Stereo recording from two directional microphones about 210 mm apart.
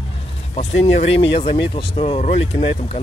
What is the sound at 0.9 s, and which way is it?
Speech, 25° left (ahead or behind).